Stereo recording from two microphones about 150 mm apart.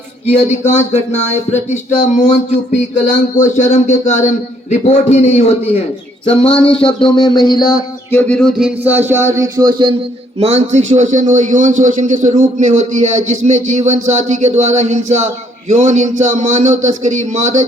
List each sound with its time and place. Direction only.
0.3 s speech: 50° left (ahead or behind); by 7.8 s 30° left (ahead or behind)
8.1 s a man's voice: 5° left (ahead or behind); by 9.9 s 30° right (ahead or behind)
10.4 s a man's voice: 50° right (ahead or behind)